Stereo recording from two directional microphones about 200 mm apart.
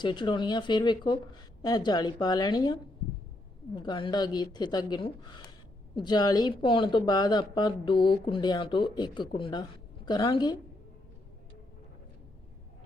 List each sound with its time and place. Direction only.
0.0 s speech: 25° left (ahead or behind)
3.8 s speech: 25° left (ahead or behind)